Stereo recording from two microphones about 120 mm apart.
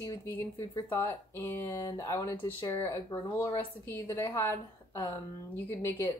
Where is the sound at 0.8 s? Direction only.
20° left (ahead or behind).